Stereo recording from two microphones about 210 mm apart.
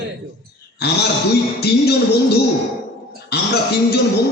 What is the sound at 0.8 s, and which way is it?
A man's voice, 50° left (ahead or behind).